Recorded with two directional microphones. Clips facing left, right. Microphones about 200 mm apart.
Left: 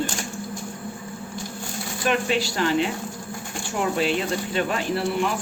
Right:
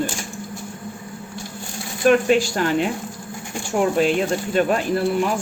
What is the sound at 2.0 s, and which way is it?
Speech, 50° right (ahead or behind).